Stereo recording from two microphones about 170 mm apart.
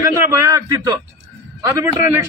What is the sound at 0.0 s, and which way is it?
A man's voice, 20° right (ahead or behind).